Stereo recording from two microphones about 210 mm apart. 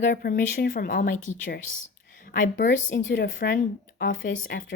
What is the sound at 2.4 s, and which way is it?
Speech, 60° left (ahead or behind).